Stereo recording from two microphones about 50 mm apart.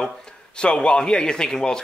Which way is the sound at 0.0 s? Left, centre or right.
Centre.